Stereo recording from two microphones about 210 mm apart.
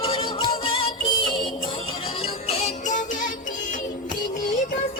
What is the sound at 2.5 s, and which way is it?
Music, 30° left (ahead or behind).